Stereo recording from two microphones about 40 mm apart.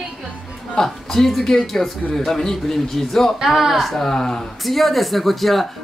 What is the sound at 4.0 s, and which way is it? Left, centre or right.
Speech, centre.